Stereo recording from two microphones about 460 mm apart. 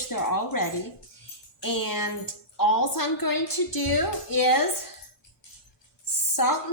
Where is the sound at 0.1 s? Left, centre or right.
Left.